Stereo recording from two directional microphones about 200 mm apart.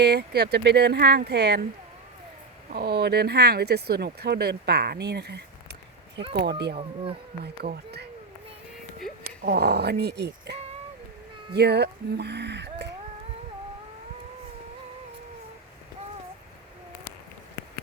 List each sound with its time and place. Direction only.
0.0 s speech: 55° right (ahead or behind)
2.7 s speech: 55° right (ahead or behind)
6.7 s speech: 30° right (ahead or behind)
7.4 s speech: 50° right (ahead or behind)
9.2 s speech: 50° right (ahead or behind)